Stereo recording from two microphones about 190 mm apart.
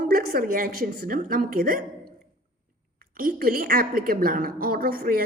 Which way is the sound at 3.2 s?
50° right (ahead or behind).